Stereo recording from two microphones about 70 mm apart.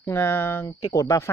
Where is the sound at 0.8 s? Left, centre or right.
Left.